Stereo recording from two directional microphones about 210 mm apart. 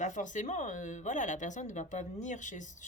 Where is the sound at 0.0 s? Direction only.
35° left (ahead or behind).